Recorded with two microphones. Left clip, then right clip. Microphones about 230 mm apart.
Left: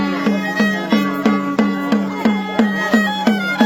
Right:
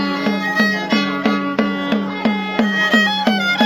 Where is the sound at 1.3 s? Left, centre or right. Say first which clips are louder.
Left 1 dB; right.